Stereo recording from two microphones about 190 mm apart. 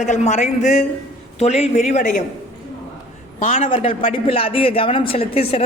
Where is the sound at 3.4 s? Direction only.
45° left (ahead or behind).